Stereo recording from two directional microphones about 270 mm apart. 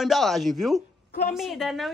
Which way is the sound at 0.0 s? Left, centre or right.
Centre.